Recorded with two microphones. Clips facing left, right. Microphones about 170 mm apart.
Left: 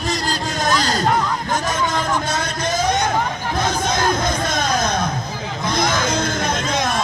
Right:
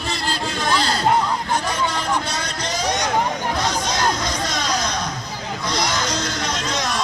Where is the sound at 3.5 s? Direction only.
50° left (ahead or behind).